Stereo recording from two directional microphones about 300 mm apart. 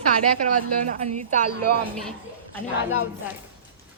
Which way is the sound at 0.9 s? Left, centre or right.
Right.